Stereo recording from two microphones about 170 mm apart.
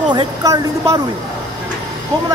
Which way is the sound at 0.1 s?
20° right (ahead or behind).